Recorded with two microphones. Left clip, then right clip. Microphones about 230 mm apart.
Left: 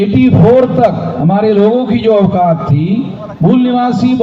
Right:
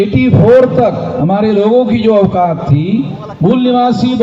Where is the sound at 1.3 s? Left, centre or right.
Right.